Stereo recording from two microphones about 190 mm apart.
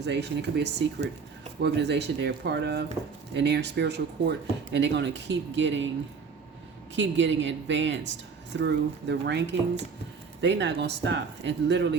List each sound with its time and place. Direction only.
0.0 s speech: 60° right (ahead or behind)
6.9 s speech: 70° right (ahead or behind)